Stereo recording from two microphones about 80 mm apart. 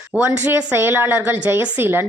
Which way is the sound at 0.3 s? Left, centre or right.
Right.